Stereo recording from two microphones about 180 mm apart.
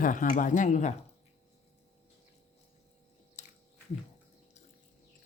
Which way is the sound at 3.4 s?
40° left (ahead or behind).